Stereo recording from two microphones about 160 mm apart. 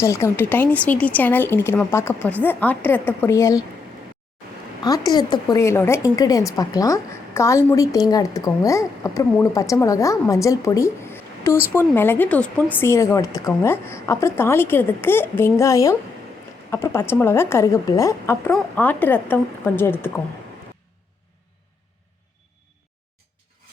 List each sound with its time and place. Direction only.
0.0 s a woman's voice: 20° left (ahead or behind)
4.8 s a woman's voice: 25° left (ahead or behind)